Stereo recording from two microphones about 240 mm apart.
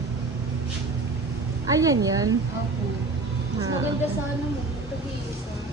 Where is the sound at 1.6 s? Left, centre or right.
Centre.